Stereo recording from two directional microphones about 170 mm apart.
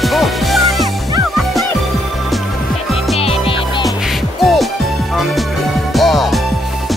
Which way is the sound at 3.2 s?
35° left (ahead or behind).